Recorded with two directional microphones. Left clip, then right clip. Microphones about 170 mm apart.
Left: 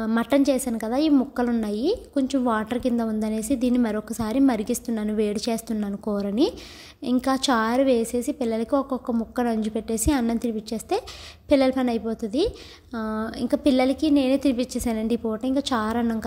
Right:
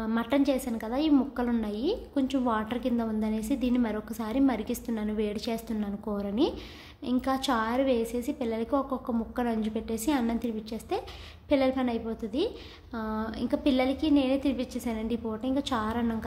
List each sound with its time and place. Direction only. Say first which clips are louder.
0.0 s a woman's voice: left 6 dB; 35° left (ahead or behind)